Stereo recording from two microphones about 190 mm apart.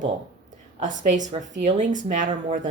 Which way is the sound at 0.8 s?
40° right (ahead or behind).